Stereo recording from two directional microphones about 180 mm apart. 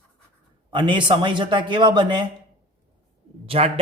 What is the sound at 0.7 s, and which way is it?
A man's voice, 25° right (ahead or behind).